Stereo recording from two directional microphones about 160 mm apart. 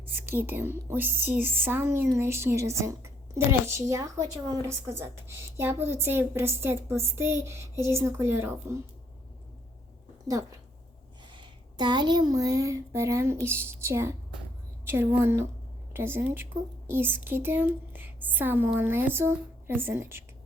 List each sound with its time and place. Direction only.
0.1 s speech: 10° right (ahead or behind)
11.3 s speech: 30° right (ahead or behind)